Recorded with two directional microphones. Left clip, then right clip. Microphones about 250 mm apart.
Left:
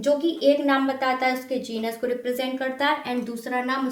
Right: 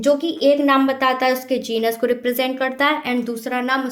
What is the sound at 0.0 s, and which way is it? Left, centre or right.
A woman's voice, right.